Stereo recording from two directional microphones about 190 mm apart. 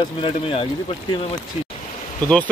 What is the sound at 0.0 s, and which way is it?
Speech, 25° left (ahead or behind).